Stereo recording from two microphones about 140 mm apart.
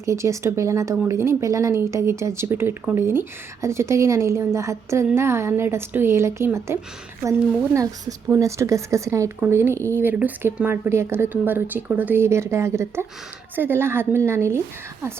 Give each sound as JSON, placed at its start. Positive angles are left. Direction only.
{"t": 0.0, "sound": "speech", "side_deg": -20}